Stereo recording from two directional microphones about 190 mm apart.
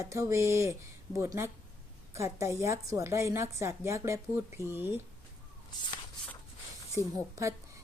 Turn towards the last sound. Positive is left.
turn(degrees=-15)  # may be behind; listen again after turning